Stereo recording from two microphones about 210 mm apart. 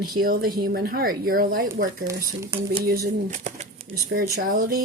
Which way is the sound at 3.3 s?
30° right (ahead or behind).